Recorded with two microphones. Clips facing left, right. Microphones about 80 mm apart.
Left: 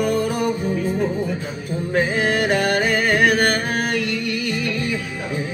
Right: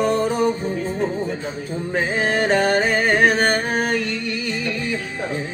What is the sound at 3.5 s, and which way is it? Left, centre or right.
Music, right.